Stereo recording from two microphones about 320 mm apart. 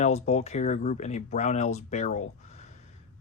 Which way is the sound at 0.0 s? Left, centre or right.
Left.